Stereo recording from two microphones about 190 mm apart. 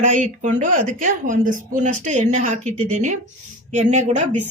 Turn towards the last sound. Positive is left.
turn(degrees=-35)  # may be behind; listen again after turning